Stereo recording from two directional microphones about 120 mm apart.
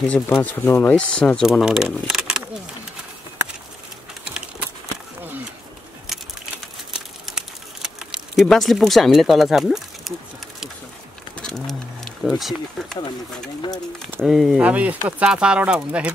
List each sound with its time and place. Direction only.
0.1 s speech: 15° left (ahead or behind)
1.4 s speech: 5° right (ahead or behind)
4.2 s typing: 10° right (ahead or behind)
6.1 s a sound: 5° right (ahead or behind)
6.9 s crumpling: 5° right (ahead or behind)
11.3 s wild animals: 5° left (ahead or behind)
14.2 s speech: centre (ahead or behind)